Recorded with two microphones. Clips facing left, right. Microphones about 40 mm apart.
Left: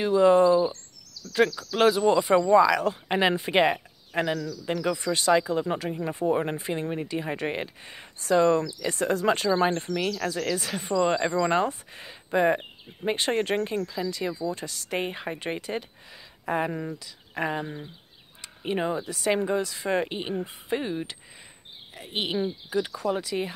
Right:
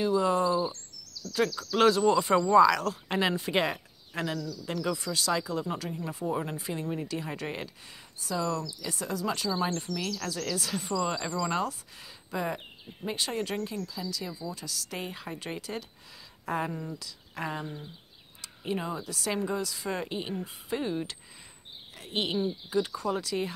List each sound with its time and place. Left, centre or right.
0.0 s speech: left
8.2 s speech: left
14.5 s speech: left
16.7 s speech: left
17.0 s speech: left
20.8 s speech: centre